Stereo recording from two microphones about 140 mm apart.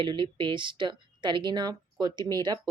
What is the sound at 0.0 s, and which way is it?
Speech, 35° right (ahead or behind).